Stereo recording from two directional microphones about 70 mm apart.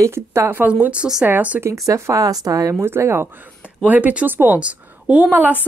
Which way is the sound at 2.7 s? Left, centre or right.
Right.